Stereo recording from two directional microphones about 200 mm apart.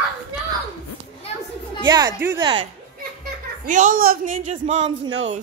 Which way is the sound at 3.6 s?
40° right (ahead or behind).